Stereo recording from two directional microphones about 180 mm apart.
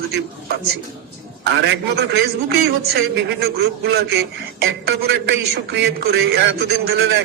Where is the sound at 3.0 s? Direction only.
65° right (ahead or behind).